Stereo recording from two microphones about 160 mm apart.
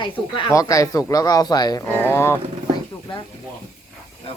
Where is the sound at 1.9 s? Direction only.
15° left (ahead or behind).